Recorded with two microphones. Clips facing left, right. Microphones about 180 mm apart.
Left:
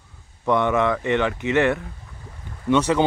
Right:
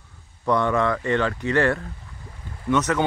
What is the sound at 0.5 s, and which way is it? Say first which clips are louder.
Speech: left 1 dB; 20° left (ahead or behind).